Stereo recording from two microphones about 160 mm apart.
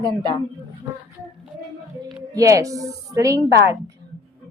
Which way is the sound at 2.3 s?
20° right (ahead or behind).